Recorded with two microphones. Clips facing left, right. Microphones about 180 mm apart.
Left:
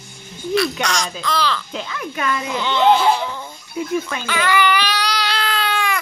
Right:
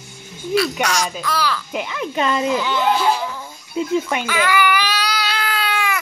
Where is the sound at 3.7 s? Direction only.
25° right (ahead or behind).